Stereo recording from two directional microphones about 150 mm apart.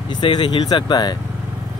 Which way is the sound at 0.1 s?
30° left (ahead or behind).